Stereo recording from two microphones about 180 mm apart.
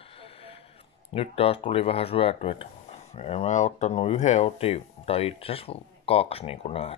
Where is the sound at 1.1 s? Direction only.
30° left (ahead or behind).